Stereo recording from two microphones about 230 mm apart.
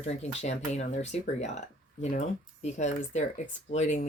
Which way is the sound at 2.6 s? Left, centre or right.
Left.